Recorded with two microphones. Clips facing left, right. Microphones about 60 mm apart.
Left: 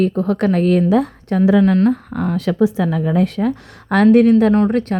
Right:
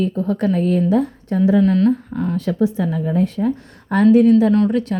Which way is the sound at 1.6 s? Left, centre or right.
Left.